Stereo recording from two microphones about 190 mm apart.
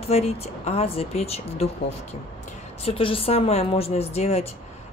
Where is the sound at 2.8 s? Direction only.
30° left (ahead or behind).